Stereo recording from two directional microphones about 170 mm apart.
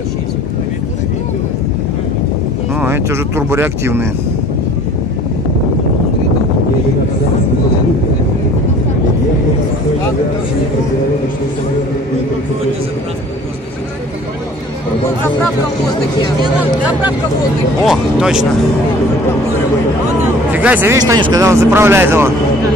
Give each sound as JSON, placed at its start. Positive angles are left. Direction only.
{"t": 2.8, "sound": "speech", "side_deg": -15}
{"t": 17.8, "sound": "speech", "side_deg": -5}
{"t": 20.5, "sound": "speech", "side_deg": -10}